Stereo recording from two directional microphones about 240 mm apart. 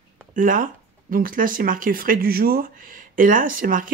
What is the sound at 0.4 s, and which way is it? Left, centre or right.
Speech, right.